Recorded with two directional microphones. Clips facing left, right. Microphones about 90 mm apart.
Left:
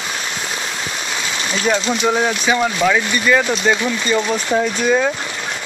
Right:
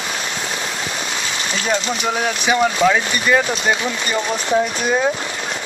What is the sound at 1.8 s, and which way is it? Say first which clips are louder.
Speech: left 3 dB; 30° left (ahead or behind).